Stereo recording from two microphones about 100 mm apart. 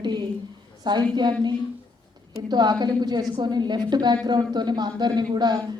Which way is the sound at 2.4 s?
45° right (ahead or behind).